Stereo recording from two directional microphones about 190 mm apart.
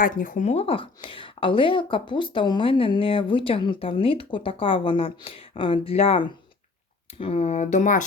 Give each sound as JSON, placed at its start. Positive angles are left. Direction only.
{"t": 0.0, "sound": "speech", "side_deg": 45}